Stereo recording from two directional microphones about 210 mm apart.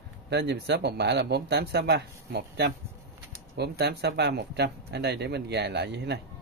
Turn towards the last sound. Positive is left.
turn(degrees=-55)  # may be behind; listen again after turning